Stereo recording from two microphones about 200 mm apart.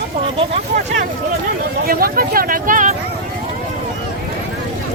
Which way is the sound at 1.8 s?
45° right (ahead or behind).